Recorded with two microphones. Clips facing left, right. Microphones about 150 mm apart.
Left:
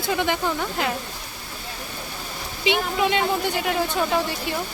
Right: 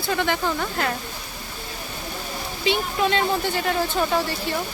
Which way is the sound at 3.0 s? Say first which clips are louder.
Right 1 dB; 10° left (ahead or behind).